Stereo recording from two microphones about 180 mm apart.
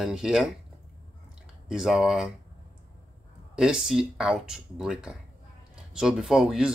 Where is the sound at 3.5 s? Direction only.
5° right (ahead or behind).